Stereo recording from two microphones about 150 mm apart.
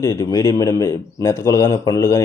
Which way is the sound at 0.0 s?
20° left (ahead or behind).